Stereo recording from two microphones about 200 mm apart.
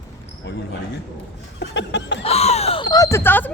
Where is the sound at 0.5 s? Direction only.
60° left (ahead or behind).